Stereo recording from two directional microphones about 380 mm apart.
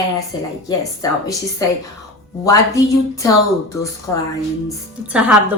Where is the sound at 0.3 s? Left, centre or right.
Centre.